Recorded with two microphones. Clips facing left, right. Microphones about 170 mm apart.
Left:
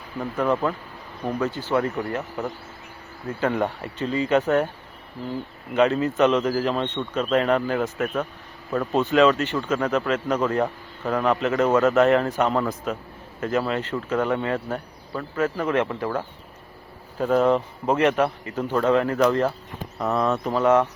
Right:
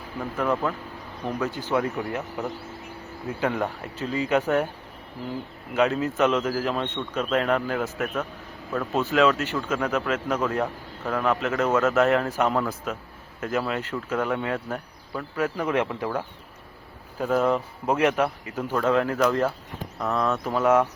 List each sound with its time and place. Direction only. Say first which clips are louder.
0.3 s speech: left 3 dB; centre (ahead or behind)
1.4 s speech: left 2 dB; 10° right (ahead or behind)
5.7 s speech: left 3 dB; 5° right (ahead or behind)